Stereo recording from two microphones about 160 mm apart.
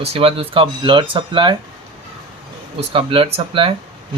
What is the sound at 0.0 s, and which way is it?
Speech, 40° right (ahead or behind).